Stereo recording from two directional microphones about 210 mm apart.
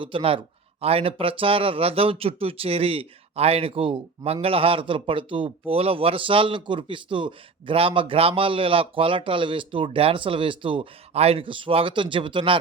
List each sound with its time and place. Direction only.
0.0 s speech: 25° right (ahead or behind)